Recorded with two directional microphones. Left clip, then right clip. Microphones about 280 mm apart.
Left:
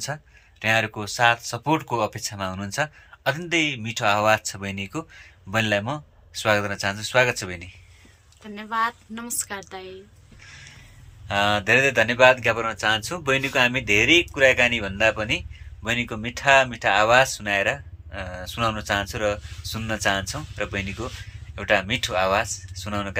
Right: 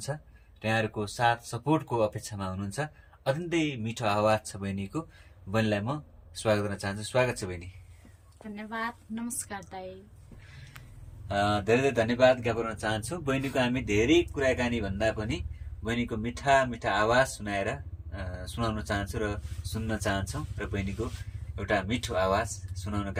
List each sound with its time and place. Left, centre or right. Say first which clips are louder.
0.6 s speech: left 7 dB; left
8.5 s a woman's voice: left 10 dB; centre
11.3 s speech: left 6 dB; left
21.5 s speech: left 8 dB; left